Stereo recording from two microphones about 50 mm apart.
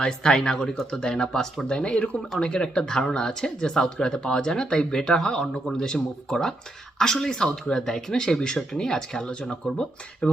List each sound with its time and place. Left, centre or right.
0.0 s speech: centre